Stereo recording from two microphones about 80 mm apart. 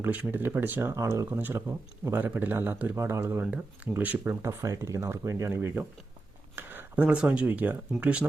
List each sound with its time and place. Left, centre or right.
0.0 s a man's voice: right
0.9 s speech: right
1.3 s a man's voice: right
3.4 s speech: centre